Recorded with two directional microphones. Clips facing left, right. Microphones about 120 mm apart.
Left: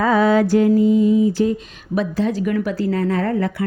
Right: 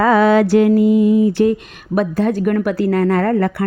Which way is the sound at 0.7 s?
65° right (ahead or behind).